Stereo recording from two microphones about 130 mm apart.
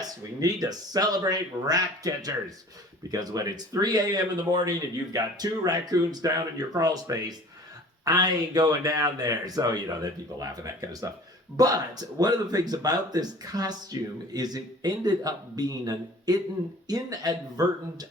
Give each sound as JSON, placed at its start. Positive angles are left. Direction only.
{"t": 0.0, "sound": "speech", "side_deg": -30}